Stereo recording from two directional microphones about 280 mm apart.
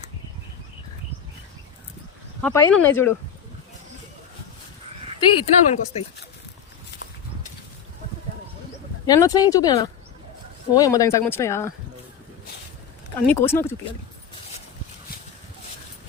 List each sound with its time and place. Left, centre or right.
2.4 s speech: centre
5.4 s speech: left
9.0 s speech: centre
13.2 s speech: centre